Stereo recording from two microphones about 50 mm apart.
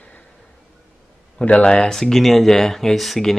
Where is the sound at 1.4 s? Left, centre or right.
Left.